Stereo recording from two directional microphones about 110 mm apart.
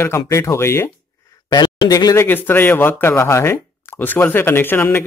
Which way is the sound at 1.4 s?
40° left (ahead or behind).